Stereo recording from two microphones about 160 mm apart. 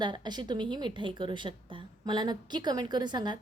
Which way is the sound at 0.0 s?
25° right (ahead or behind).